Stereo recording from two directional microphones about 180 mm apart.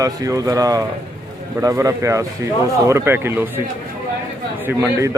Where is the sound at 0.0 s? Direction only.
20° right (ahead or behind).